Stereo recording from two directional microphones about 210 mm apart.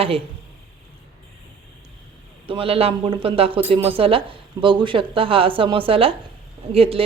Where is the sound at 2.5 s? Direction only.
25° right (ahead or behind).